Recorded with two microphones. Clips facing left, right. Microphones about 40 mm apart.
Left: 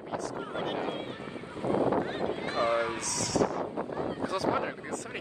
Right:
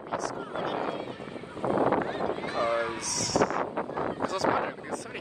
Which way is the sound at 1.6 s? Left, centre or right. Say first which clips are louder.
Right 2 dB; right.